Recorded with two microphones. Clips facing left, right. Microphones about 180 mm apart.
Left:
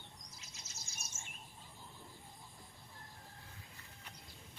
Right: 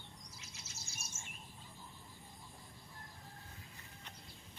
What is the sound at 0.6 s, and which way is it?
Bird, 10° right (ahead or behind).